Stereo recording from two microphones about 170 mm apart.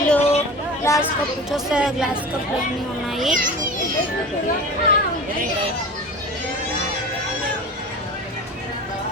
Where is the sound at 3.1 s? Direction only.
Centre (ahead or behind).